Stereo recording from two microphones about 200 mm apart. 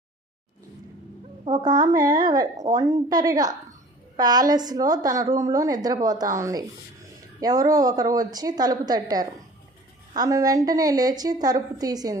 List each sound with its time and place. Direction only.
1.5 s a woman's voice: 20° right (ahead or behind)